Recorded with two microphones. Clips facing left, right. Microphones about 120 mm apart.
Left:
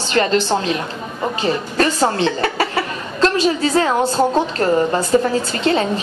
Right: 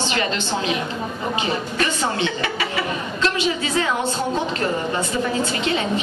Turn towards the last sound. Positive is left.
turn(degrees=40)  # may be behind; listen again after turning